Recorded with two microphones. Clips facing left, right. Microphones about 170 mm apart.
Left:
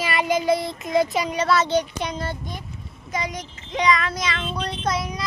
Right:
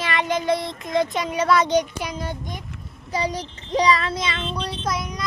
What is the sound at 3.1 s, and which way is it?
Child singing, 35° right (ahead or behind).